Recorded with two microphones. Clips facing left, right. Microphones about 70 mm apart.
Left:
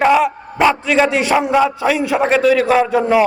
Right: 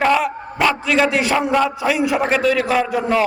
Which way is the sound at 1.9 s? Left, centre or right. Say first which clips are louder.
Left 2 dB; centre.